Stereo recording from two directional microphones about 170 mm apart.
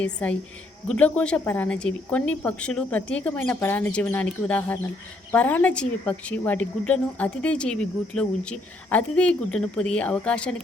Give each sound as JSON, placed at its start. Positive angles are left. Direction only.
{"t": 0.0, "sound": "a woman's voice", "side_deg": 5}